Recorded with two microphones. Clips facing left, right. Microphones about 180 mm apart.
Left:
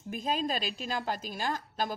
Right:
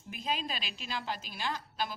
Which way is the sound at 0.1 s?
45° left (ahead or behind).